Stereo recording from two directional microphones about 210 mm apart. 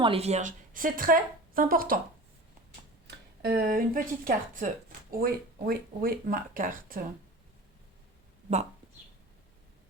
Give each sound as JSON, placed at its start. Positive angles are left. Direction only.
{"t": 0.0, "sound": "a woman's voice", "side_deg": -30}
{"t": 3.1, "sound": "speech", "side_deg": -50}